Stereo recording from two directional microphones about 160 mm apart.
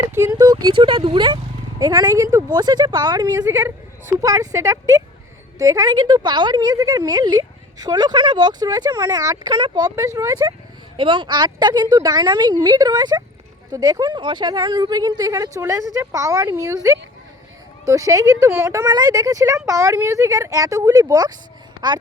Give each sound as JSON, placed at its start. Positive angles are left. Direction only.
{"t": 0.1, "sound": "speech", "side_deg": -15}
{"t": 0.3, "sound": "a woman's voice", "side_deg": -25}